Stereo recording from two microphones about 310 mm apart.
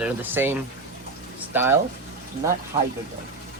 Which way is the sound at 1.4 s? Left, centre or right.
Centre.